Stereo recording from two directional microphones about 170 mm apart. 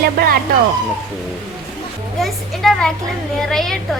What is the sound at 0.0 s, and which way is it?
Speech, 65° right (ahead or behind).